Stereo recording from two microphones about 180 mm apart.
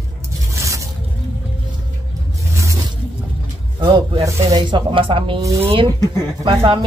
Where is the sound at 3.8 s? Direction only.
25° right (ahead or behind).